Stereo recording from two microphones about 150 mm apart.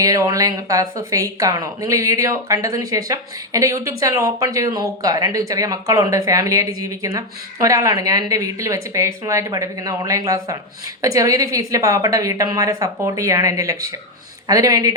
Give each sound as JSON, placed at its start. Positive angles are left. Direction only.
{"t": 0.0, "sound": "speech", "side_deg": -25}